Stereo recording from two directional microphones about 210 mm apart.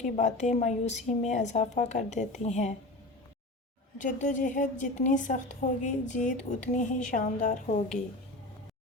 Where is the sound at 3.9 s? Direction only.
40° left (ahead or behind).